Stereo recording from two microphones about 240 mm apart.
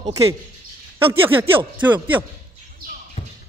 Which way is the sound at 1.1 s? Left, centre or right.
Centre.